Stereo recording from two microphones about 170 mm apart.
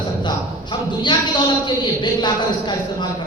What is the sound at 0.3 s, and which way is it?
A man's voice, 25° left (ahead or behind).